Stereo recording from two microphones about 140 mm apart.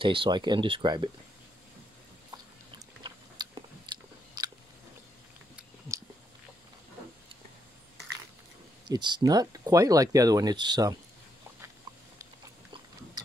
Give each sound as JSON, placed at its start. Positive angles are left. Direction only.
{"t": 0.0, "sound": "speech", "side_deg": -40}
{"t": 3.0, "sound": "biting", "side_deg": -35}
{"t": 5.9, "sound": "a sound", "side_deg": -20}
{"t": 8.8, "sound": "speech", "side_deg": -30}